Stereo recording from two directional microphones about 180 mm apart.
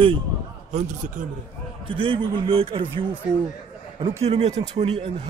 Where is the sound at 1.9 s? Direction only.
30° right (ahead or behind).